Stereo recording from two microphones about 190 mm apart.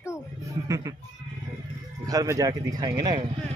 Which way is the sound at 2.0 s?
20° right (ahead or behind).